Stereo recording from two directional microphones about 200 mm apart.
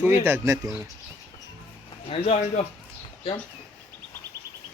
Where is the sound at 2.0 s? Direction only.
30° left (ahead or behind).